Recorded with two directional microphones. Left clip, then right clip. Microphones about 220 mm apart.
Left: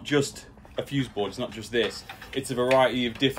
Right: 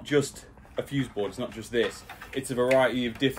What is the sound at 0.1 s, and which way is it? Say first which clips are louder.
Speech: even; 5° left (ahead or behind).